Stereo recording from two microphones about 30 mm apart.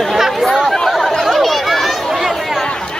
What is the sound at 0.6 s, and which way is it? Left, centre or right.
Chatter, centre.